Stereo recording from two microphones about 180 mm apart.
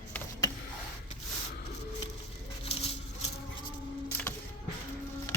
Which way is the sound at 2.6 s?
35° left (ahead or behind).